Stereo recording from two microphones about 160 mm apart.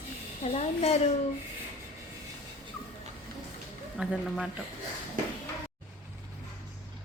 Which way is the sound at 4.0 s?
5° right (ahead or behind).